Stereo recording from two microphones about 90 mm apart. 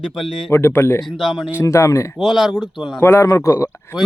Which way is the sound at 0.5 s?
25° left (ahead or behind).